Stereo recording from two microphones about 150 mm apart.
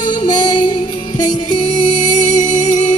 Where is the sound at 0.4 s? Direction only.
30° left (ahead or behind).